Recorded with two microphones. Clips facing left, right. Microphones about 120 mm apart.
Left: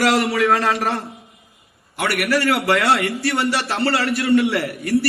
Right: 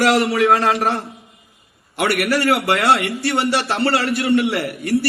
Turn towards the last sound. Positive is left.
turn(degrees=-25)  # may be behind; listen again after turning